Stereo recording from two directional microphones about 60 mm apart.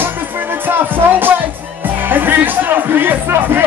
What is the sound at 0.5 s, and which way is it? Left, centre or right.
Music, right.